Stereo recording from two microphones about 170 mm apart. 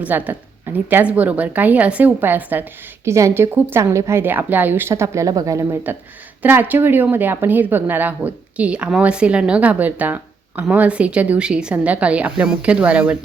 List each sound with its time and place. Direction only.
0.0 s a woman's voice: 10° right (ahead or behind)